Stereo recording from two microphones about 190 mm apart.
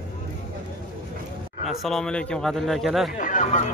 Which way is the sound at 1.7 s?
Centre (ahead or behind).